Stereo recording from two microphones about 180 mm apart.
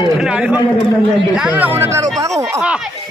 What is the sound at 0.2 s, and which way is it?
A man's voice, 5° right (ahead or behind).